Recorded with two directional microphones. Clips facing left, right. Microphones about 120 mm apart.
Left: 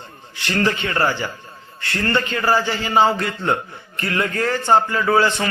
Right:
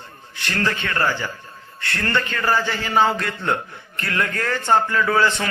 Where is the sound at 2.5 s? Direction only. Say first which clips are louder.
Left 2 dB; 15° left (ahead or behind).